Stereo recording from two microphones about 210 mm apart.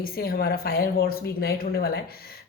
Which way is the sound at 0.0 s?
45° left (ahead or behind).